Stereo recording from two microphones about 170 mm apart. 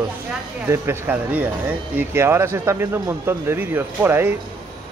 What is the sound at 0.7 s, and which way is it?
Speech, 10° right (ahead or behind).